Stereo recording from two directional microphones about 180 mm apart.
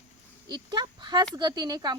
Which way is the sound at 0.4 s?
25° right (ahead or behind).